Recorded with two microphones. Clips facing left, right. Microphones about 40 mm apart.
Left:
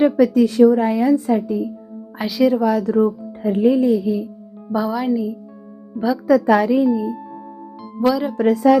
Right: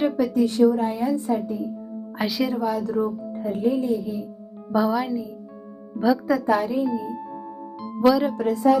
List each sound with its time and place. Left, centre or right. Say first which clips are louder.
0.2 s speech: left 4 dB; left
2.1 s speech: left 7 dB; centre
2.6 s speech: left 7 dB; left
4.7 s speech: left 2 dB; centre
6.4 s speech: left 7 dB; left
7.8 s music: even; centre
8.4 s speech: left 6 dB; left